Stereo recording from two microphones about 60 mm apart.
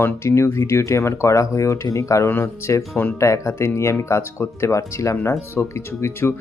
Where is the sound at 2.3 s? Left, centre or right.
Left.